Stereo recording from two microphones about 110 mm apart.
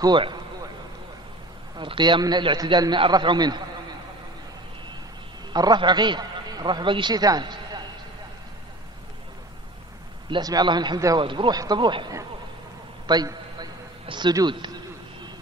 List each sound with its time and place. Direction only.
0.0 s a man's voice: 45° right (ahead or behind)
1.8 s a man's voice: 45° right (ahead or behind)
5.5 s a man's voice: 40° right (ahead or behind)
10.4 s a man's voice: 40° right (ahead or behind)
13.0 s a sound: 40° right (ahead or behind)
14.0 s a man's voice: 45° right (ahead or behind)